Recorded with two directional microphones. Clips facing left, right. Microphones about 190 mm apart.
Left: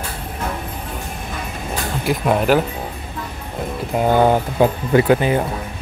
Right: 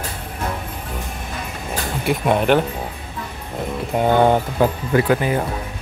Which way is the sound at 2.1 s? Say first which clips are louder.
Even; centre (ahead or behind).